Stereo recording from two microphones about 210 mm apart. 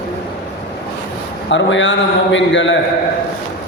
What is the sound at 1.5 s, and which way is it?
A man's voice, 60° left (ahead or behind).